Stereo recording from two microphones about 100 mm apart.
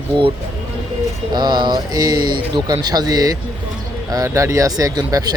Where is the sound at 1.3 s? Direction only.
45° right (ahead or behind).